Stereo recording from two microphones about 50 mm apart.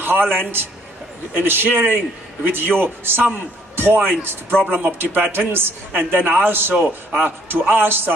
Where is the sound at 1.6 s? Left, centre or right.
Right.